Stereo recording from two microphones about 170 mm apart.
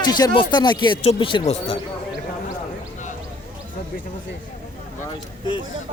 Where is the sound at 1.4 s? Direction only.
40° left (ahead or behind).